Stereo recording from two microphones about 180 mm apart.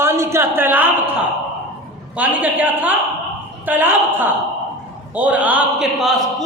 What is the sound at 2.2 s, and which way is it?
A man's voice, 10° right (ahead or behind).